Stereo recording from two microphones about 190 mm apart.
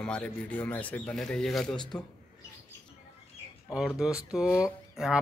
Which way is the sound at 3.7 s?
5° right (ahead or behind).